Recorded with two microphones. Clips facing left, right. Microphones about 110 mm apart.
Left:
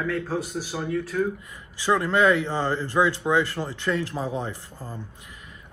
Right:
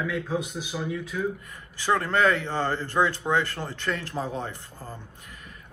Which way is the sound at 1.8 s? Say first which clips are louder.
Left 2 dB; 15° left (ahead or behind).